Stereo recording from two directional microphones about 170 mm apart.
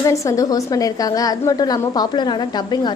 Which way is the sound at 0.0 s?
20° left (ahead or behind).